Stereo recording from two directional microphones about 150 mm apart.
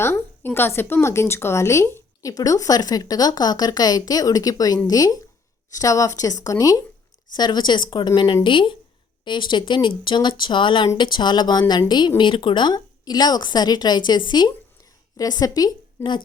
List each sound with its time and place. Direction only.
0.0 s a woman's voice: 15° left (ahead or behind)